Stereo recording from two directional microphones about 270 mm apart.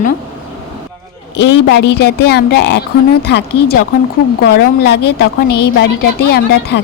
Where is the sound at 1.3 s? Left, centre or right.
Left.